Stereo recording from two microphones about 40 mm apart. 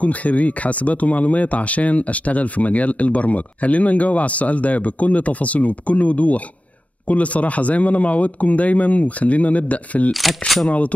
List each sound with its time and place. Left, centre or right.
0.0 s speech: left